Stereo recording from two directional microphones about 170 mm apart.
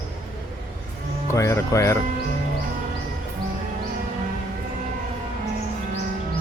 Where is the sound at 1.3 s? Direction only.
15° left (ahead or behind).